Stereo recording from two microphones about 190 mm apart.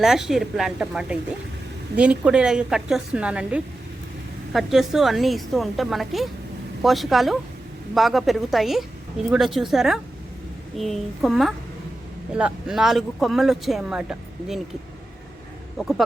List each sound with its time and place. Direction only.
0.0 s speech: centre (ahead or behind)